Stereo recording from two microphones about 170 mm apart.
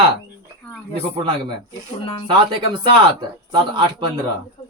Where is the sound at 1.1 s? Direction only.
25° right (ahead or behind).